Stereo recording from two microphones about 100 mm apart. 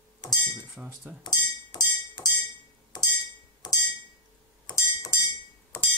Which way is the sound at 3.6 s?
45° left (ahead or behind).